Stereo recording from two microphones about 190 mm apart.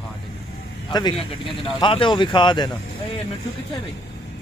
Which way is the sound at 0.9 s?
20° left (ahead or behind).